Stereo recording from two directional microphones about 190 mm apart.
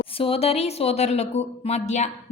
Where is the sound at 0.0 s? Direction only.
30° left (ahead or behind).